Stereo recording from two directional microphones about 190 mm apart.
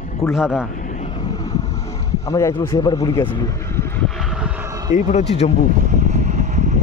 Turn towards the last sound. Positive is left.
turn(degrees=-40)  # may be behind; listen again after turning